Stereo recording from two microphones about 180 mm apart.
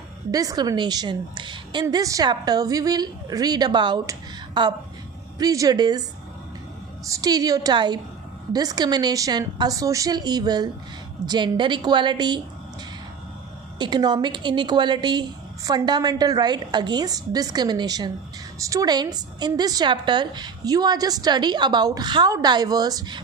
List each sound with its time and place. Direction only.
0.3 s a woman's voice: 20° right (ahead or behind)
13.7 s a woman's voice: 25° right (ahead or behind)